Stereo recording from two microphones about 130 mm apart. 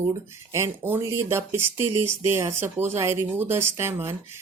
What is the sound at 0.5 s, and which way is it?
Speech, 20° right (ahead or behind).